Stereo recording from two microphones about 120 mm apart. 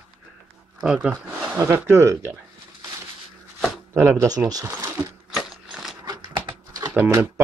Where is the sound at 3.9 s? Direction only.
25° right (ahead or behind).